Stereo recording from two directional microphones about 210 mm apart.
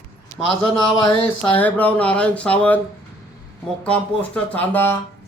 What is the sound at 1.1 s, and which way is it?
Speech, 10° left (ahead or behind).